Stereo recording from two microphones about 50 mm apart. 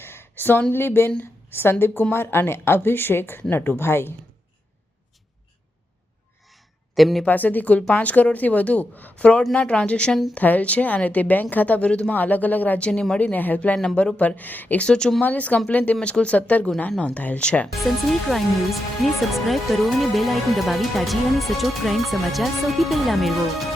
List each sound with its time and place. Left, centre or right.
0.0 s a sound: left
0.7 s a woman's voice: left
6.9 s speech: centre
7.3 s a woman's voice: left
12.9 s speech: centre
13.1 s a woman's voice: left
14.8 s speech: centre
15.2 s a woman's voice: left
17.7 s speech: centre